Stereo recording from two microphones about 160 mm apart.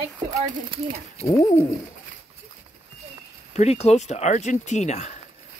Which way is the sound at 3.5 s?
45° left (ahead or behind).